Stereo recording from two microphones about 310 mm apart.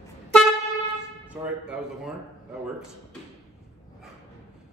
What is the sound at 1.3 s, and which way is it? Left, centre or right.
Speech, centre.